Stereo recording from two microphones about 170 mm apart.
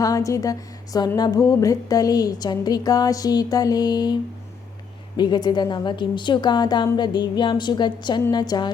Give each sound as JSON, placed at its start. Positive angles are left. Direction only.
{"t": 0.0, "sound": "a woman's voice", "side_deg": 20}